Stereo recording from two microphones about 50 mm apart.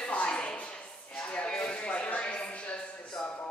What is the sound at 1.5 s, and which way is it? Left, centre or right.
Music, centre.